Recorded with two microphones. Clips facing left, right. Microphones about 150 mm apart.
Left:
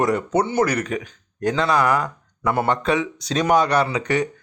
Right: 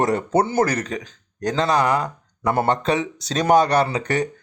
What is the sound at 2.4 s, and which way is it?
Speech, 40° right (ahead or behind).